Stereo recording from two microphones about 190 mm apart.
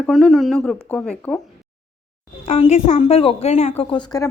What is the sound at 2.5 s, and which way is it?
A woman's voice, 35° left (ahead or behind).